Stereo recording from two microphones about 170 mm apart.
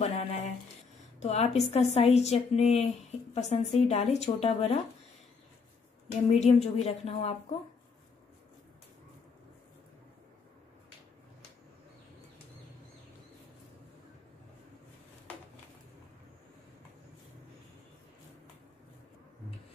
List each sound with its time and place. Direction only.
0.0 s a sound: 45° left (ahead or behind)
1.2 s speech: 40° left (ahead or behind)
6.2 s speech: 40° left (ahead or behind)